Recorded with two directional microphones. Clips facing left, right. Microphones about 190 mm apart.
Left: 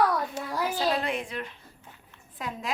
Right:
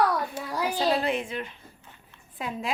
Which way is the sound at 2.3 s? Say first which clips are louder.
Right 3 dB; 25° right (ahead or behind).